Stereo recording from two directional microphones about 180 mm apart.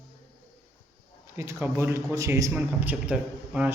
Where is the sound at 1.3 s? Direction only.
15° right (ahead or behind).